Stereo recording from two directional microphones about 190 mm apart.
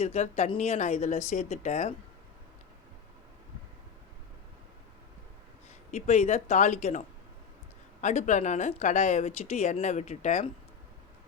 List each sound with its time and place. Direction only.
0.0 s speech: 35° left (ahead or behind)
5.9 s speech: 35° left (ahead or behind)
8.0 s speech: 40° left (ahead or behind)